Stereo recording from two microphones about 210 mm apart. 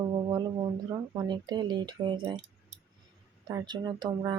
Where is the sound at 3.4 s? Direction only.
20° right (ahead or behind).